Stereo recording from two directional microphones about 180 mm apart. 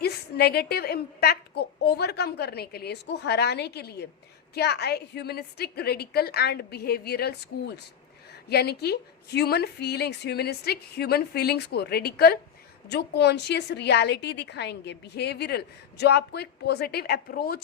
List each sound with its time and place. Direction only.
0.0 s a woman's voice: 60° left (ahead or behind)
8.4 s a woman's voice: 65° left (ahead or behind)